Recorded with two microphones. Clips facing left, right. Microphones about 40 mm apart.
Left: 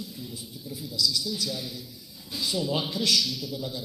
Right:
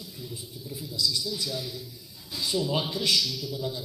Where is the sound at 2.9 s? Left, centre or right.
Right.